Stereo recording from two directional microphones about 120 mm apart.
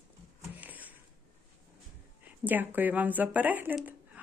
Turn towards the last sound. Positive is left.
turn(degrees=-15)  # may be behind; listen again after turning